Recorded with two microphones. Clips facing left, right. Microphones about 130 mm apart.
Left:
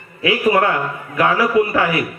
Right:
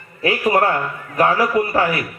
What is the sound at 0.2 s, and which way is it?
A man's voice, 40° right (ahead or behind).